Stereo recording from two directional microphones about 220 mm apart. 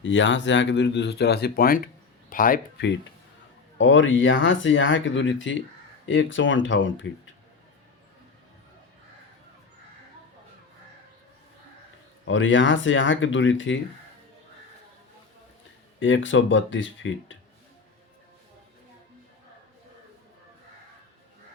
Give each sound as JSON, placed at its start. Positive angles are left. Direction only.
{"t": 0.0, "sound": "speech", "side_deg": 55}
{"t": 3.8, "sound": "speech", "side_deg": 60}
{"t": 12.2, "sound": "speech", "side_deg": 60}
{"t": 16.0, "sound": "speech", "side_deg": 60}